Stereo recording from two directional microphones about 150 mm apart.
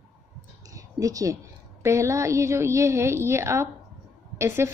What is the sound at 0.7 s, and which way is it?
A woman's voice, 25° right (ahead or behind).